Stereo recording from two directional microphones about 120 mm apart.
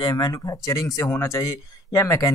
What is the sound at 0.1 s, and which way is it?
Speech, 30° left (ahead or behind).